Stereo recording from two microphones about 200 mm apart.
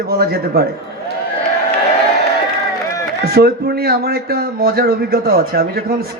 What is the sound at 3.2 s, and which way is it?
A man's voice, 50° right (ahead or behind).